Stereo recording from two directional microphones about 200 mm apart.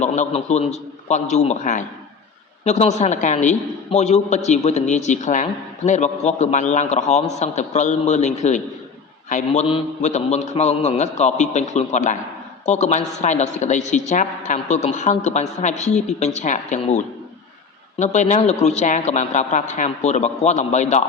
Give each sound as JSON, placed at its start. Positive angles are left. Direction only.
{"t": 0.0, "sound": "a man's voice", "side_deg": 35}
{"t": 18.0, "sound": "a man's voice", "side_deg": 35}